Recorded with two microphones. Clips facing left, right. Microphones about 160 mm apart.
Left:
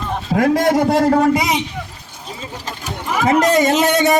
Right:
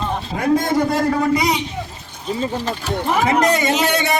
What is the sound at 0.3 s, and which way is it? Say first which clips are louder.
Speech: left 4 dB; 90° left.